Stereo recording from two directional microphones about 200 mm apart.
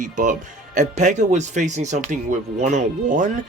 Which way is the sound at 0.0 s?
40° right (ahead or behind).